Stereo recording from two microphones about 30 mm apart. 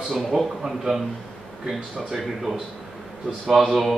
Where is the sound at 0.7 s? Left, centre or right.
Centre.